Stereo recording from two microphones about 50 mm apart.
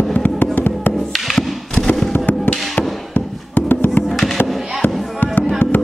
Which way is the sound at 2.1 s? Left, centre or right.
Left.